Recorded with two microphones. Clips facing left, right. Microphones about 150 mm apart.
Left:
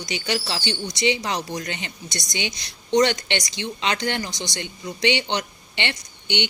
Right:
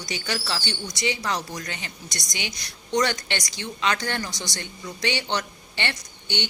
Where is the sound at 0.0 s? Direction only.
20° left (ahead or behind).